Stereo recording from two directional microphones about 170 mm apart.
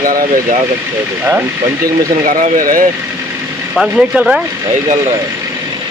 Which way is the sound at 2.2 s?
55° right (ahead or behind).